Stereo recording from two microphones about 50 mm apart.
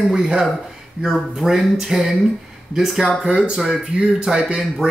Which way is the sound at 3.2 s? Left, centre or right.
Centre.